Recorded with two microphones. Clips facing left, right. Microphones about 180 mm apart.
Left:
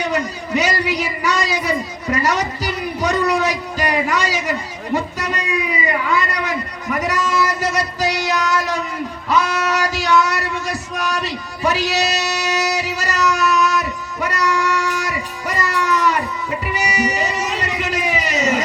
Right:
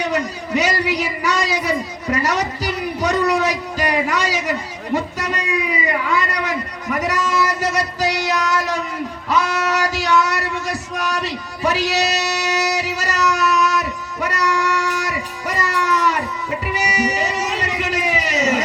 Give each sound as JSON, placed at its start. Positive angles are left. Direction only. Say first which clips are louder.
{"t": 0.0, "sound": "a man's voice", "louder": "even", "side_deg": -75}
{"t": 4.9, "sound": "a man's voice", "louder": "even", "side_deg": -90}
{"t": 9.3, "sound": "a sound", "louder": "left 1 dB", "side_deg": -50}
{"t": 16.7, "sound": "music", "louder": "even", "side_deg": -90}